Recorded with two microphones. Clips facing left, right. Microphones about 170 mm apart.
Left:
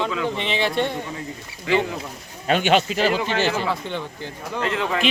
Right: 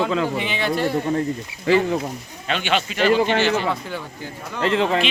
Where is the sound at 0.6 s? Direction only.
5° right (ahead or behind).